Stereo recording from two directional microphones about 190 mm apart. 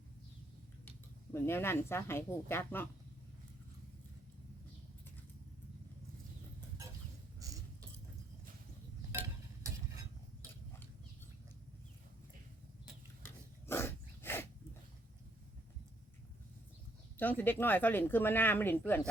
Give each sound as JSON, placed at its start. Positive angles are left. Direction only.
{"t": 0.9, "sound": "speech", "side_deg": 10}
{"t": 7.3, "sound": "a sound", "side_deg": -15}
{"t": 13.2, "sound": "dog", "side_deg": 15}
{"t": 17.2, "sound": "speech", "side_deg": 10}